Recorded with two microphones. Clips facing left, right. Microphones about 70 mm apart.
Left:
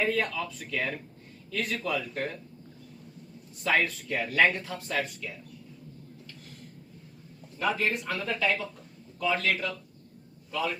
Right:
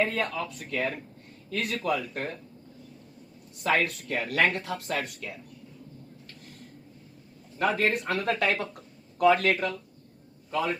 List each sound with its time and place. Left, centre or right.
0.1 s speech: right
3.6 s speech: right
4.9 s speech: right
7.6 s a man's voice: right